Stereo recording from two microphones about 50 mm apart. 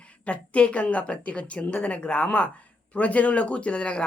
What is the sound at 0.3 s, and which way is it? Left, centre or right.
Speech, left.